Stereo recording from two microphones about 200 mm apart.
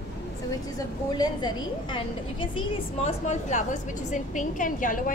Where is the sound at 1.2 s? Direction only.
20° left (ahead or behind); by 5.1 s 40° left (ahead or behind).